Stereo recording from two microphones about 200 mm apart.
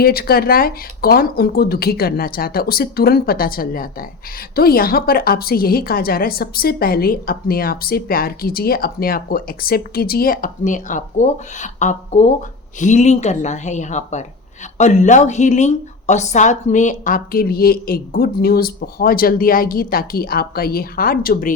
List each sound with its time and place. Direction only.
0.0 s a woman's voice: 50° left (ahead or behind)